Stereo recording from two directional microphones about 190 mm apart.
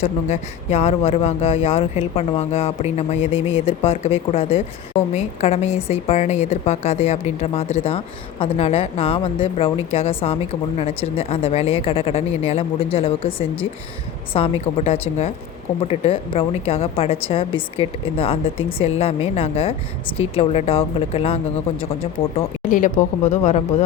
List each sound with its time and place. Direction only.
0.0 s a woman's voice: 35° left (ahead or behind)
15.9 s a woman's voice: 30° left (ahead or behind)
22.7 s a woman's voice: 45° left (ahead or behind)